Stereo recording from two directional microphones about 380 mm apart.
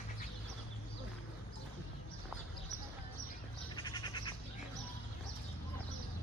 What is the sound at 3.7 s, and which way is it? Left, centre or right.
Goat, centre.